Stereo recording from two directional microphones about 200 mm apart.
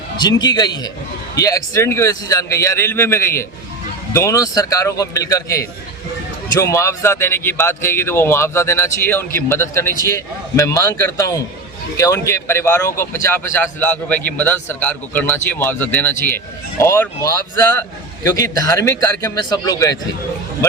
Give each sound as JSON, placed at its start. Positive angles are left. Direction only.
{"t": 0.2, "sound": "a man's voice", "side_deg": 20}
{"t": 20.6, "sound": "music", "side_deg": 15}